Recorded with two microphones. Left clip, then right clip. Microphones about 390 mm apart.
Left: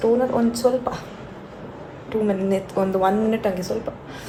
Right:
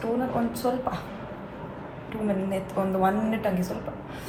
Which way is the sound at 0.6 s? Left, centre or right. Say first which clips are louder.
Left 9 dB; left.